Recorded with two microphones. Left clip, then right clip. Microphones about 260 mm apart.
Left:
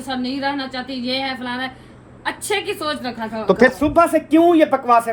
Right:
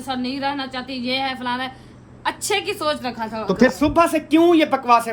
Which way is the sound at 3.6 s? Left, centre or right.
Right.